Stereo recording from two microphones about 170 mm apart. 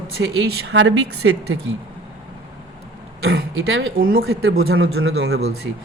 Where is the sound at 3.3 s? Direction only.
75° right (ahead or behind).